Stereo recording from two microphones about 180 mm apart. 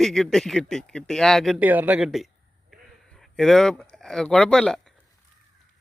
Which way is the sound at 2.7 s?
Centre (ahead or behind).